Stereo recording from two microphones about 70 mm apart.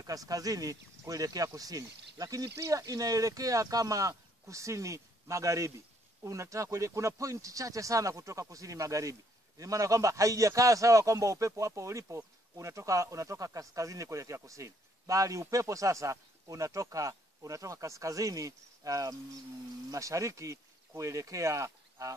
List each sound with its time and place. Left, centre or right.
0.0 s speech: right